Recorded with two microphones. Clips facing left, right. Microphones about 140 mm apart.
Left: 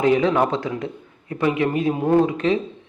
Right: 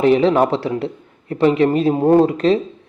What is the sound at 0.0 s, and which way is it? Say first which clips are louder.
A man's voice: right 4 dB; 25° right (ahead or behind).